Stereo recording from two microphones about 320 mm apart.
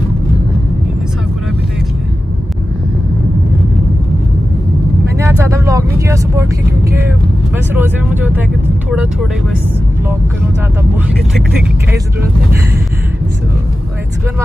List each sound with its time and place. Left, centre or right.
5.1 s vehicle: centre
7.5 s vehicle: centre